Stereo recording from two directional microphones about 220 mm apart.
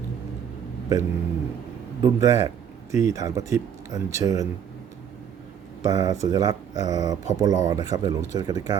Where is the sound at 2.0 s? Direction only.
15° right (ahead or behind).